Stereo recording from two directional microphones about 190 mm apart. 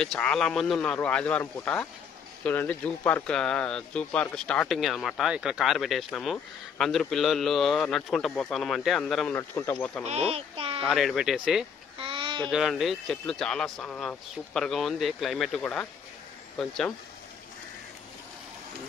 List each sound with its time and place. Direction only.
0.0 s speech: 5° left (ahead or behind)
10.3 s a child's voice: 30° right (ahead or behind)
10.9 s speech: centre (ahead or behind)
12.0 s a sound: 30° right (ahead or behind)
12.4 s speech: centre (ahead or behind)